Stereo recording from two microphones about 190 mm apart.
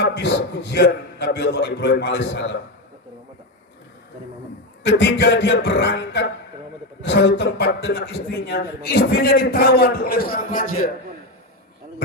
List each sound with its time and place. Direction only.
0.0 s a man's voice: 70° left (ahead or behind)
4.8 s a man's voice: 65° left (ahead or behind); by 10.8 s 50° left (ahead or behind)